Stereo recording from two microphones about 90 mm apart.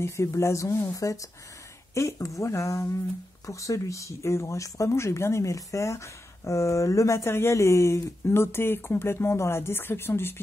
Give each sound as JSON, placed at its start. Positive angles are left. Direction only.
{"t": 0.0, "sound": "speech", "side_deg": 35}